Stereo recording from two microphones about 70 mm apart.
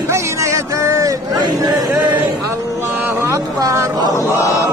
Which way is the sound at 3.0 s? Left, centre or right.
Right.